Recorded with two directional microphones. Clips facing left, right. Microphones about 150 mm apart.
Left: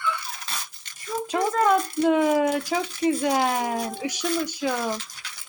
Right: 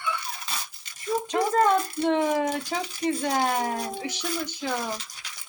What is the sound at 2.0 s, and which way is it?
Speech, 5° left (ahead or behind).